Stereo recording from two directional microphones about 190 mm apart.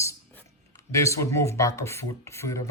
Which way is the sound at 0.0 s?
15° left (ahead or behind).